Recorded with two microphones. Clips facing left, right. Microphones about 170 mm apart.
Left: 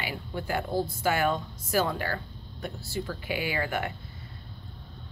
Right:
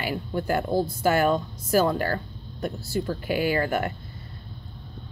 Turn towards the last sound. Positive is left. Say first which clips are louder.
# right 6 dB
turn(degrees=-45)  # may be behind; listen again after turning